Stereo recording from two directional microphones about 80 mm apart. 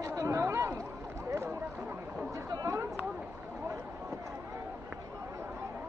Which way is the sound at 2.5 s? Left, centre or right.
Right.